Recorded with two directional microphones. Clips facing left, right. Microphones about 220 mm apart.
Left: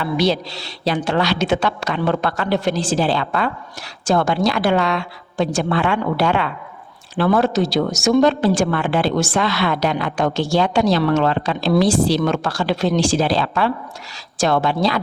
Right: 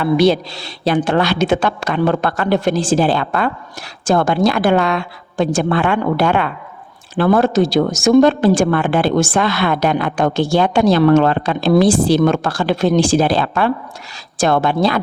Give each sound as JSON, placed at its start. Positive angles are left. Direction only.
{"t": 0.0, "sound": "speech", "side_deg": -55}